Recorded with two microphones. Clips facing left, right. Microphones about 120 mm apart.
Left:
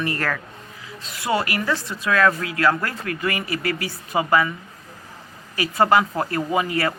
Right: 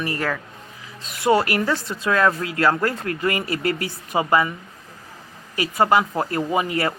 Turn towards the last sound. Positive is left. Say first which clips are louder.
# even
turn(degrees=-20)  # may be behind; listen again after turning